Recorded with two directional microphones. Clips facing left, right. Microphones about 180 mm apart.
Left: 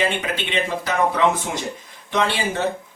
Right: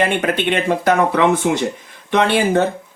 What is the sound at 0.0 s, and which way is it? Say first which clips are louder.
Speech: right 6 dB; 55° right (ahead or behind).